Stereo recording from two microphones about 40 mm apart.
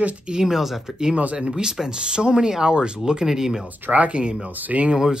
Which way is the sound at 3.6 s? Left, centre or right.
Right.